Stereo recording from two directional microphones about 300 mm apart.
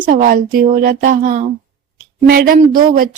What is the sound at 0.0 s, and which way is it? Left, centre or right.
Speech, right.